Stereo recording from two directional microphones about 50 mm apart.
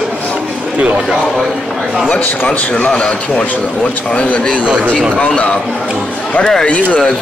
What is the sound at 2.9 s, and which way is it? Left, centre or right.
A man's voice, centre.